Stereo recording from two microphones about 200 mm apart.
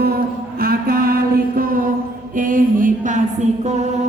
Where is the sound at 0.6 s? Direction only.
50° right (ahead or behind).